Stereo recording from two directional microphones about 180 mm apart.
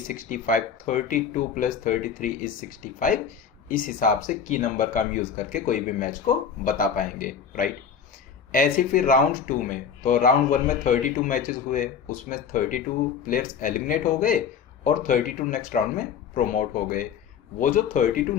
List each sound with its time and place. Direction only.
0.1 s speech: 50° left (ahead or behind)